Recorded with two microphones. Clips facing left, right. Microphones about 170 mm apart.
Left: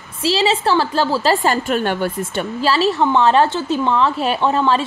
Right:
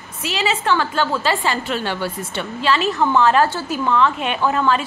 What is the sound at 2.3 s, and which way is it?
A woman's voice, 35° left (ahead or behind).